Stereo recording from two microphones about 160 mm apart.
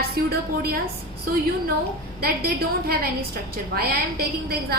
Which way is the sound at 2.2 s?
70° right (ahead or behind).